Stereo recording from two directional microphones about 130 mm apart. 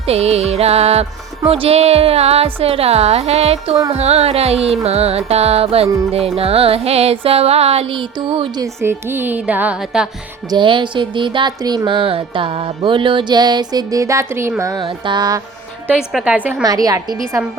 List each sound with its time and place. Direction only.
0.0 s a woman's voice: 50° right (ahead or behind)
8.5 s music: 20° right (ahead or behind); by 10.1 s 5° right (ahead or behind)
10.5 s music: 40° right (ahead or behind); by 14.5 s 20° right (ahead or behind)
14.6 s a woman's voice: 25° right (ahead or behind)
14.8 s music: 35° right (ahead or behind)
15.9 s music: 5° right (ahead or behind)
16.6 s a woman's voice: 30° right (ahead or behind)